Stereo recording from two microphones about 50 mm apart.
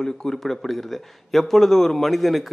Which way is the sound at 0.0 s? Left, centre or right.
Centre.